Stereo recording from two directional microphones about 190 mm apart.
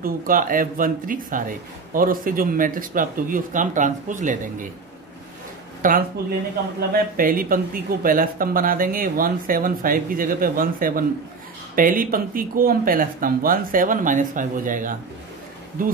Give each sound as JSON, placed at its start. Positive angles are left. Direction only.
{"t": 0.0, "sound": "speech", "side_deg": -45}
{"t": 5.8, "sound": "speech", "side_deg": -45}